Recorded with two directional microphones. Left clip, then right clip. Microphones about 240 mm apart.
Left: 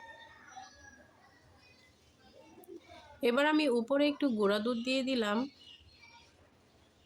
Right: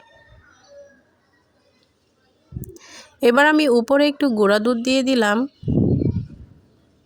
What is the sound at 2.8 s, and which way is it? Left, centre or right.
Speech, right.